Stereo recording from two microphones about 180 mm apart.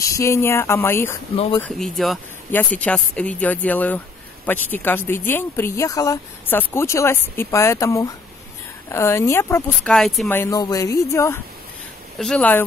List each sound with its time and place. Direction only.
0.0 s speech: 15° left (ahead or behind)
1.3 s speech: 30° left (ahead or behind)
1.8 s speech: centre (ahead or behind)
9.9 s speech: centre (ahead or behind)
10.3 s speech: 15° left (ahead or behind)